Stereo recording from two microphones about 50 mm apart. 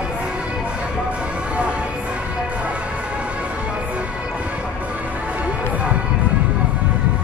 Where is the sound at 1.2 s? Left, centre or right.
Right.